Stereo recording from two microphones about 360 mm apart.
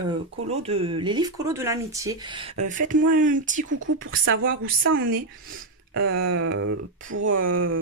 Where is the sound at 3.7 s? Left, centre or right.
Right.